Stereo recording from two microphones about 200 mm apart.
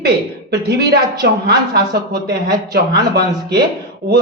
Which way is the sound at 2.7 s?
55° right (ahead or behind).